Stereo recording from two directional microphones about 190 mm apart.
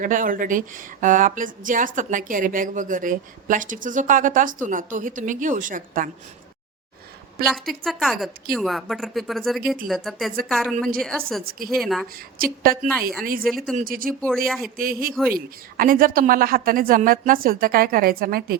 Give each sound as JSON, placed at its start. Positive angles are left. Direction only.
{"t": 0.0, "sound": "speech", "side_deg": -45}
{"t": 7.4, "sound": "a woman's voice", "side_deg": 0}
{"t": 11.4, "sound": "speech", "side_deg": -50}
{"t": 11.8, "sound": "a woman's voice", "side_deg": 0}
{"t": 12.4, "sound": "speech", "side_deg": -50}
{"t": 13.5, "sound": "a woman's voice", "side_deg": 0}
{"t": 13.7, "sound": "speech", "side_deg": -50}
{"t": 14.4, "sound": "a woman's voice", "side_deg": 0}
{"t": 14.8, "sound": "speech", "side_deg": -50}